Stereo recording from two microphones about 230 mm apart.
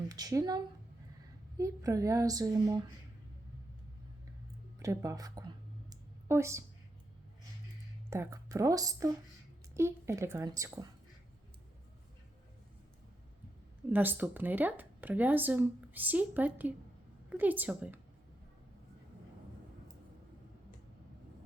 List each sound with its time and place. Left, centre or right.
0.1 s speech: centre
4.8 s speech: centre
5.9 s a sound: centre
8.1 s speech: centre
13.9 s a woman's voice: centre